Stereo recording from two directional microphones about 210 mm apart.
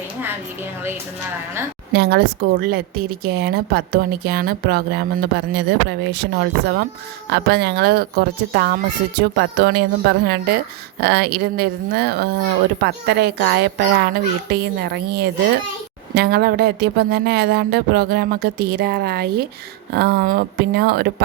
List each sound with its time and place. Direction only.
1.9 s a woman's voice: 50° right (ahead or behind)